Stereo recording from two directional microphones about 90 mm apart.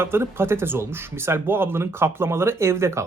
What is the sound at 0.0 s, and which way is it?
Speech, 25° right (ahead or behind).